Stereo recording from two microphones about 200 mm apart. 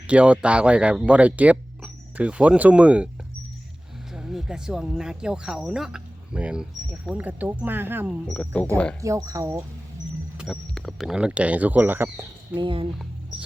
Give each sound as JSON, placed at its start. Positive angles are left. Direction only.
{"t": 0.1, "sound": "speech", "side_deg": -5}
{"t": 4.1, "sound": "speech", "side_deg": -5}
{"t": 8.3, "sound": "speech", "side_deg": 5}
{"t": 9.0, "sound": "speech", "side_deg": -15}
{"t": 10.3, "sound": "speech", "side_deg": 0}
{"t": 12.5, "sound": "speech", "side_deg": -25}